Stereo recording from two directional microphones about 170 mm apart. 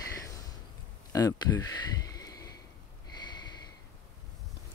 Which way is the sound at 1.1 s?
20° left (ahead or behind).